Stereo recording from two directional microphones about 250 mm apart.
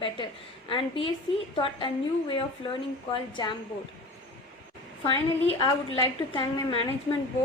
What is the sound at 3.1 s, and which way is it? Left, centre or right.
Speech, centre.